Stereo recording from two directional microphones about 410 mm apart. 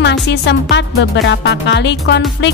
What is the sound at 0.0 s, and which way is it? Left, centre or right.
Speech, left.